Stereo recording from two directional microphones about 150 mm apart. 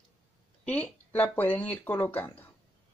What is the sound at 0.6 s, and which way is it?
Speech, 10° left (ahead or behind).